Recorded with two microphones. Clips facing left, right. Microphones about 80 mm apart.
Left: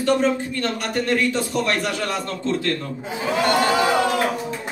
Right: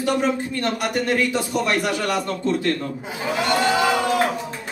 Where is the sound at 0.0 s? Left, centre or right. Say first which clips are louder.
Left 2 dB; centre.